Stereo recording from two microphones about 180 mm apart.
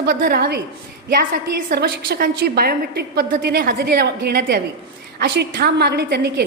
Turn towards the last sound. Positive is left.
turn(degrees=-65)  # may be behind; listen again after turning